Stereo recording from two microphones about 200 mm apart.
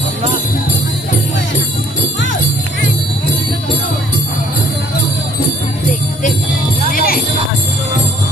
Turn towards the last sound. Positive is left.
turn(degrees=45)  # may be behind; listen again after turning